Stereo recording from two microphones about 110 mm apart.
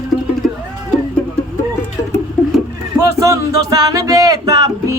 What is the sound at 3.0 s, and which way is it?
Music, 30° right (ahead or behind).